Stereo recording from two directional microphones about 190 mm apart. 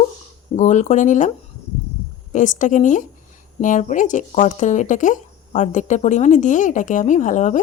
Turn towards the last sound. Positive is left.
turn(degrees=40)  # may be behind; listen again after turning